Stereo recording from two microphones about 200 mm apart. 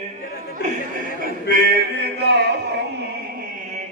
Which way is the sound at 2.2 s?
60° right (ahead or behind).